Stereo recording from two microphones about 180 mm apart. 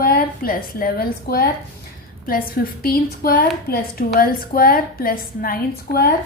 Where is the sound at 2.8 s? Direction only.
55° left (ahead or behind).